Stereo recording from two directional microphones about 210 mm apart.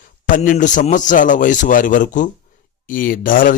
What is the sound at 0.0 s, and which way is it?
A man's voice, 40° left (ahead or behind).